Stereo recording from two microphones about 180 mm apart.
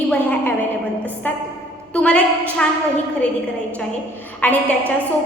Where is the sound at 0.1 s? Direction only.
10° left (ahead or behind).